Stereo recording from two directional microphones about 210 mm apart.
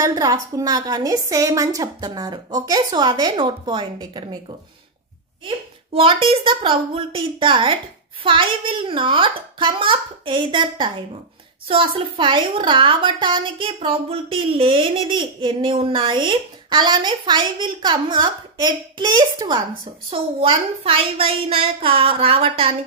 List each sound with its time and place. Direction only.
0.0 s a woman's voice: 20° right (ahead or behind)
5.9 s a woman's voice: 25° right (ahead or behind)